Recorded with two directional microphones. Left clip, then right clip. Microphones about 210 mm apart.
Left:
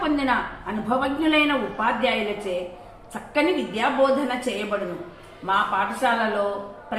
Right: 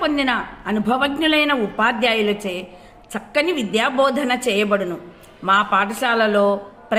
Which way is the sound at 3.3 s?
55° right (ahead or behind).